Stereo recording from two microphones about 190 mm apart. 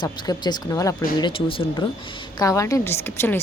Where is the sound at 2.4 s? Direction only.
15° left (ahead or behind).